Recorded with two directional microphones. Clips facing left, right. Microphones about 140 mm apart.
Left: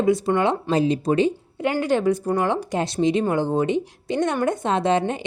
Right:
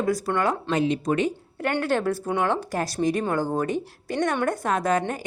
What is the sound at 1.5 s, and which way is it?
Speech, 10° left (ahead or behind).